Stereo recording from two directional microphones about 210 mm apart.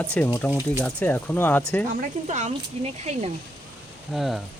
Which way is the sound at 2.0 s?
35° right (ahead or behind).